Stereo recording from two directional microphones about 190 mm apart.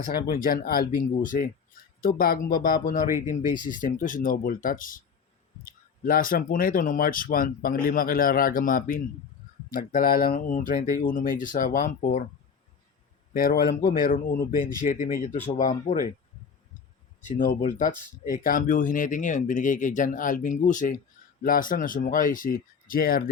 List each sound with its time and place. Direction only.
0.2 s speech: 50° left (ahead or behind)
13.3 s speech: 50° left (ahead or behind)
17.2 s speech: 40° left (ahead or behind)